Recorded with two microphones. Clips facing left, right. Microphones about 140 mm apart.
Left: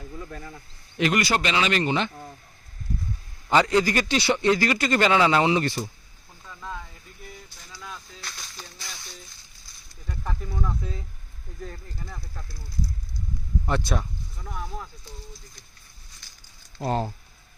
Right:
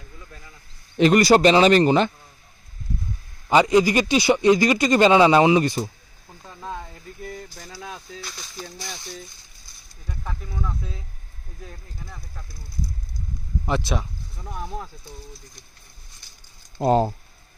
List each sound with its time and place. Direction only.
0.3 s speech: 55° left (ahead or behind)
0.9 s speech: 35° right (ahead or behind)
3.5 s speech: 15° right (ahead or behind)
6.4 s snake: 30° right (ahead or behind)
7.3 s speech: 55° right (ahead or behind)
8.2 s speech: 5° right (ahead or behind)
10.1 s speech: centre (ahead or behind)
13.7 s speech: centre (ahead or behind)
14.3 s speech: 20° right (ahead or behind)
16.7 s speech: 40° right (ahead or behind)